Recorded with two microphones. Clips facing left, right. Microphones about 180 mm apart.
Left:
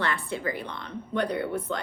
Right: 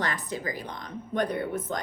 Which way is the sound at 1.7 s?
45° right (ahead or behind).